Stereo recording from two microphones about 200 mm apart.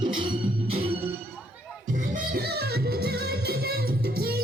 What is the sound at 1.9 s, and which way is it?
Music, 45° right (ahead or behind).